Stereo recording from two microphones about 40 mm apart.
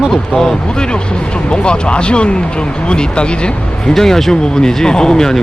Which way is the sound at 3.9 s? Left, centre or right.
Centre.